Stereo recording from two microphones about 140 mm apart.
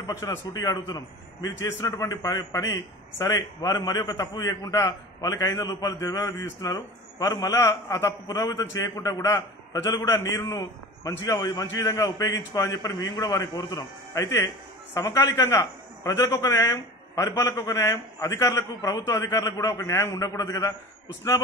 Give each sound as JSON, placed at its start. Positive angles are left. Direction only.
{"t": 0.0, "sound": "a man's voice", "side_deg": 25}